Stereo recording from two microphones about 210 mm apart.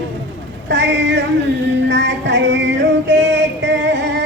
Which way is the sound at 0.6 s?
55° right (ahead or behind).